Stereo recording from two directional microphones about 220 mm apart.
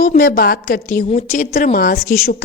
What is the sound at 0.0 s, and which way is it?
A woman's voice, 40° left (ahead or behind).